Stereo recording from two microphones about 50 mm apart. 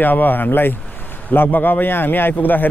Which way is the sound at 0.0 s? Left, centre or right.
Left.